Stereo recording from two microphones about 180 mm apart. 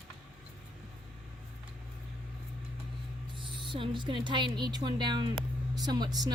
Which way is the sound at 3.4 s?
25° right (ahead or behind).